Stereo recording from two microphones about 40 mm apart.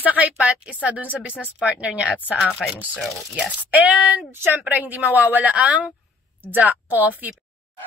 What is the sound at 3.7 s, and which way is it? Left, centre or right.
Speech, right.